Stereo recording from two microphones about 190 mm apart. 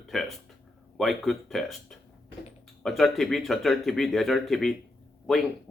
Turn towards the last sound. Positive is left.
turn(degrees=0)  # may be behind; listen again after turning